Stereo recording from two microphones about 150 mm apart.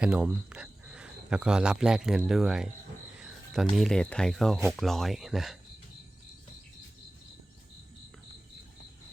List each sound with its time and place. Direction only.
0.0 s speech: 10° right (ahead or behind)